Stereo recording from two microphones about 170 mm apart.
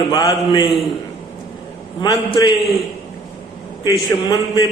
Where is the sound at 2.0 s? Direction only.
25° left (ahead or behind).